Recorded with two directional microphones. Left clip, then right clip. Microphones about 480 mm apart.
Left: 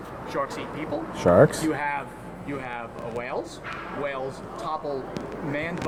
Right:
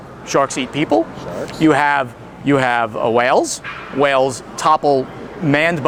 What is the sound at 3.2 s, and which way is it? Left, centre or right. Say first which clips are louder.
Speech: right 17 dB; right.